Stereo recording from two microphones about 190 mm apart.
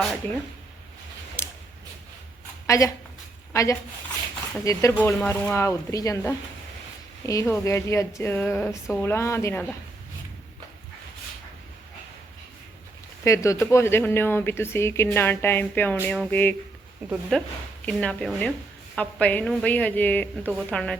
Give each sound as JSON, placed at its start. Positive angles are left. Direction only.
{"t": 1.4, "sound": "a sound", "side_deg": 15}
{"t": 2.6, "sound": "a woman's voice", "side_deg": 15}
{"t": 13.2, "sound": "speech", "side_deg": 15}